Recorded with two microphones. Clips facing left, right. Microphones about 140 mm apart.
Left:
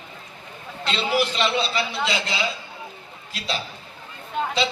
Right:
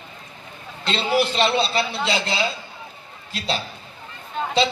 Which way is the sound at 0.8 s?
30° right (ahead or behind).